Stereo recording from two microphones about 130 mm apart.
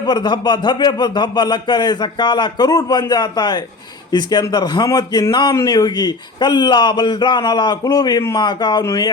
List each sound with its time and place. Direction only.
0.0 s a man's voice: 35° left (ahead or behind)
8.8 s speech: 25° left (ahead or behind)